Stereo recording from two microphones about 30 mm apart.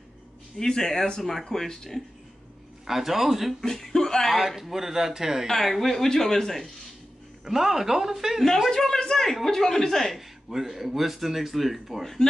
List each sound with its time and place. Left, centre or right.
0.6 s speech: centre
2.9 s speech: centre
3.6 s speech: centre
4.3 s speech: centre
5.5 s speech: centre
7.4 s speech: centre
8.6 s speech: centre
10.5 s speech: centre